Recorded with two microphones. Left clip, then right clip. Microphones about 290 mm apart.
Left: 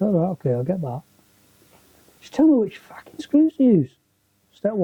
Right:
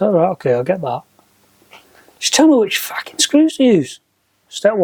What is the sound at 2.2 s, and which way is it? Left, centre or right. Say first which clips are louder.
Speech: right 7 dB; centre.